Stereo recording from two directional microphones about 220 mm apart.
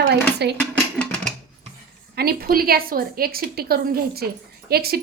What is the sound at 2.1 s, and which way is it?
A woman's voice, 45° right (ahead or behind).